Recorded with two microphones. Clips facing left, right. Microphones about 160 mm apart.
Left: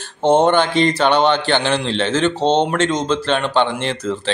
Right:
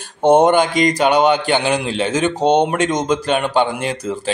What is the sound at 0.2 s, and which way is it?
Speech, 15° right (ahead or behind).